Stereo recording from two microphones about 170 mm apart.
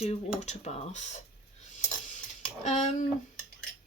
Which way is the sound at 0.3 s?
45° left (ahead or behind).